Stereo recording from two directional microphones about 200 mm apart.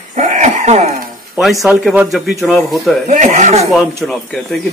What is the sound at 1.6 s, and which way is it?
Speech, 5° right (ahead or behind).